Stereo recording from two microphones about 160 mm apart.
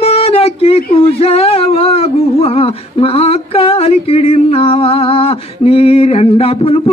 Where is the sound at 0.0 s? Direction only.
40° left (ahead or behind).